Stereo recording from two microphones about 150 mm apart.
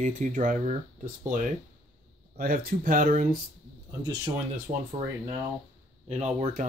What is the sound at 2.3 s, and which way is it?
Speech, 70° right (ahead or behind).